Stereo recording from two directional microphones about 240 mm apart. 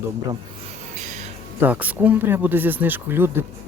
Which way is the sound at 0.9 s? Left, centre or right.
Right.